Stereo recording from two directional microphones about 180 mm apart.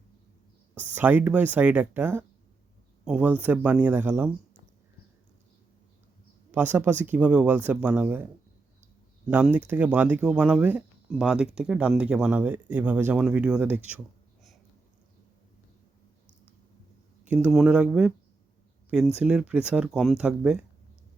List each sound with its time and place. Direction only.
0.7 s speech: 10° right (ahead or behind)
6.5 s speech: 10° right (ahead or behind)
9.3 s speech: 10° right (ahead or behind)
17.2 s speech: 5° right (ahead or behind)
19.2 s speech: 5° right (ahead or behind)